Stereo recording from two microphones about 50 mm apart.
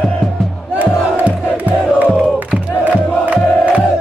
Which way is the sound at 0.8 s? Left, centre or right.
Right.